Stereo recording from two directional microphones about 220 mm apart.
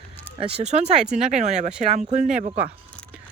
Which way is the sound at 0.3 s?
25° right (ahead or behind).